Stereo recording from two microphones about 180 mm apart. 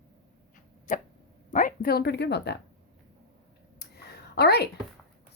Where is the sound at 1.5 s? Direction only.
50° left (ahead or behind); by 2.6 s 70° left (ahead or behind).